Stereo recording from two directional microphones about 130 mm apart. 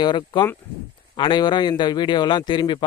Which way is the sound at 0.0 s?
35° left (ahead or behind).